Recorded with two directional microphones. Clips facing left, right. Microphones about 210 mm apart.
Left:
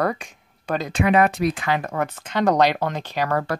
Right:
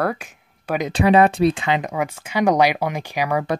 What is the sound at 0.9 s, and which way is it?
Speech, 30° right (ahead or behind).